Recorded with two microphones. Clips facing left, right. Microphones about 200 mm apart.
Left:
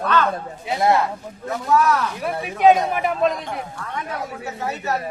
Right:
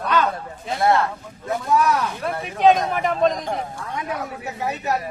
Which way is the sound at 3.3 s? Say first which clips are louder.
Right 3 dB; 35° right (ahead or behind).